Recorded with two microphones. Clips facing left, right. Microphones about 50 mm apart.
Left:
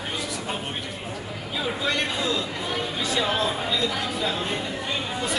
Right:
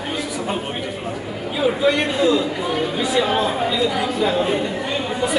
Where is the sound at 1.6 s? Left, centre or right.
Centre.